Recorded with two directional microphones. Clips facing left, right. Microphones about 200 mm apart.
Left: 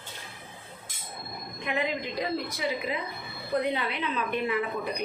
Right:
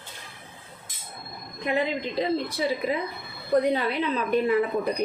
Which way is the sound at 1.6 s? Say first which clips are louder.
Right 4 dB; 30° right (ahead or behind).